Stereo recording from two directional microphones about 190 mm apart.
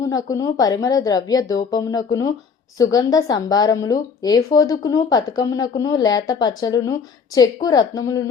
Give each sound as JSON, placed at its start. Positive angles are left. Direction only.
{"t": 0.1, "sound": "speech", "side_deg": 20}